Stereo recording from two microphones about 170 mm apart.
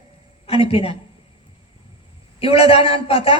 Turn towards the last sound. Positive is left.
turn(degrees=35)  # may be behind; listen again after turning